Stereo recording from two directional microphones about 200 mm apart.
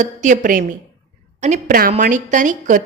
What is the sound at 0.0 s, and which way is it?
A woman's voice, 40° right (ahead or behind).